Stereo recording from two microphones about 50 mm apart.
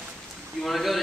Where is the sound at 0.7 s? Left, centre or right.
Centre.